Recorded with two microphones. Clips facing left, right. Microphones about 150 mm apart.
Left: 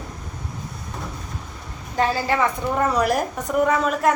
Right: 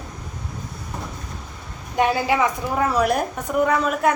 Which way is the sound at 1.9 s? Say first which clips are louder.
Right 2 dB; 15° right (ahead or behind).